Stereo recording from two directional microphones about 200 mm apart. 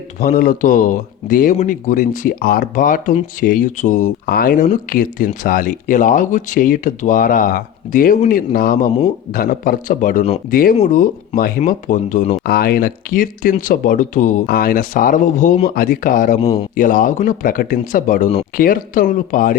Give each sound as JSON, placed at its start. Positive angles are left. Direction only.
{"t": 0.2, "sound": "speech", "side_deg": 45}
{"t": 12.5, "sound": "speech", "side_deg": 50}